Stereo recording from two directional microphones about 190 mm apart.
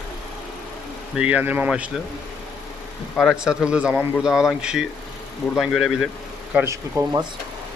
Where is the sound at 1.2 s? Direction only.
5° right (ahead or behind).